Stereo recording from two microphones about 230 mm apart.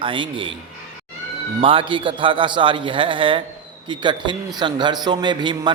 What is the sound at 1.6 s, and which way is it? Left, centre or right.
A man's voice, right.